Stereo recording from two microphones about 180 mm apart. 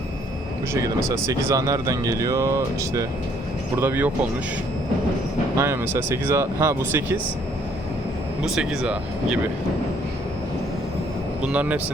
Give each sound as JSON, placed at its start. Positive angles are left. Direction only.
{"t": 0.7, "sound": "speech", "side_deg": -15}
{"t": 5.5, "sound": "speech", "side_deg": -15}
{"t": 8.4, "sound": "speech", "side_deg": 0}
{"t": 11.4, "sound": "speech", "side_deg": -10}